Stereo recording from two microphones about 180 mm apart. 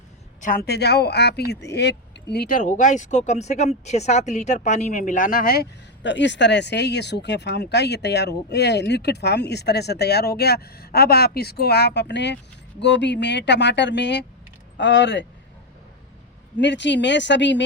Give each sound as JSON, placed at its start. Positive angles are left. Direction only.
{"t": 0.4, "sound": "speech", "side_deg": 55}
{"t": 16.6, "sound": "speech", "side_deg": 80}